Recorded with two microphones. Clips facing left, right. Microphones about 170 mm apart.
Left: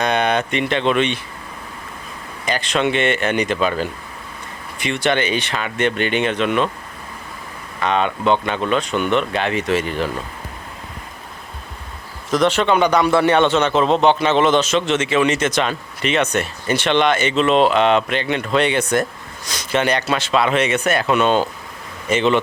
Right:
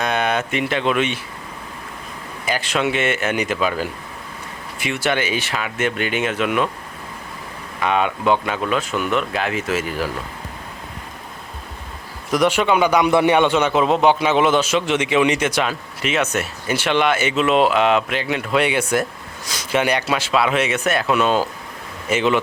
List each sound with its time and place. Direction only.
0.0 s speech: 5° right (ahead or behind)
2.5 s a man's voice: 5° right (ahead or behind)
7.8 s speech: 10° right (ahead or behind)
12.3 s a man's voice: 10° right (ahead or behind)